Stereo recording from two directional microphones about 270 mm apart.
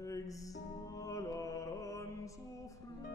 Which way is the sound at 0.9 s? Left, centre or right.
Centre.